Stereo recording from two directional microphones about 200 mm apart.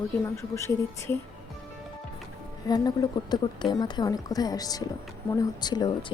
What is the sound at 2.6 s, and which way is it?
A woman's voice, 20° left (ahead or behind).